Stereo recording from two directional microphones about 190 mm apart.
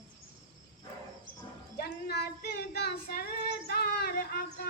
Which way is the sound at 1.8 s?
60° left (ahead or behind).